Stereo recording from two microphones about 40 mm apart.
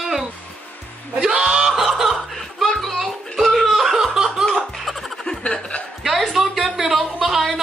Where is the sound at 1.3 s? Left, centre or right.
Centre.